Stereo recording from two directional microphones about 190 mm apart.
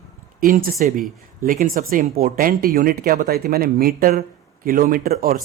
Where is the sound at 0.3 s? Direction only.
50° right (ahead or behind).